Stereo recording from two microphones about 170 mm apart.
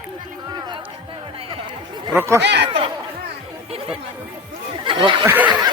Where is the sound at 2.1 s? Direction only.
15° right (ahead or behind).